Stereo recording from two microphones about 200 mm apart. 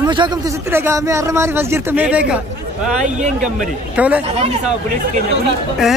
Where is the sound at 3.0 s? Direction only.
35° right (ahead or behind).